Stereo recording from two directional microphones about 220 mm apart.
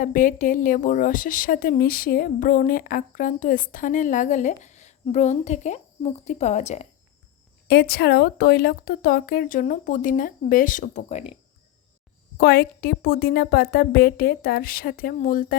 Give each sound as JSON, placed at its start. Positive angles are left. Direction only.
{"t": 0.0, "sound": "speech", "side_deg": 35}
{"t": 7.7, "sound": "speech", "side_deg": 45}
{"t": 12.4, "sound": "a woman's voice", "side_deg": 45}